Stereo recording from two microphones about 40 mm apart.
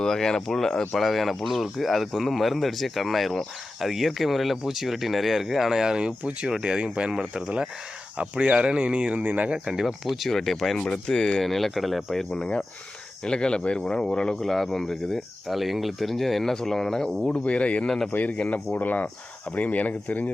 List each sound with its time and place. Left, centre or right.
0.0 s speech: centre
0.9 s speech: centre
8.2 s speech: right
9.2 s speech: right
9.8 s speech: centre
11.0 s speech: centre
11.4 s speech: centre
12.4 s speech: left
14.4 s speech: centre
15.4 s speech: centre
17.2 s speech: left
17.8 s speech: centre
18.1 s speech: left